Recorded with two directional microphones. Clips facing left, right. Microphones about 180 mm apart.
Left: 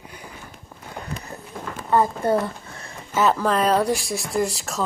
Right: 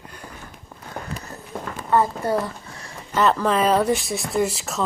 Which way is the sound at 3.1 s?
5° left (ahead or behind).